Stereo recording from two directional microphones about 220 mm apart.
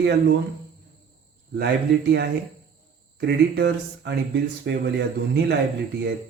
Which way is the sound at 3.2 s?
50° right (ahead or behind).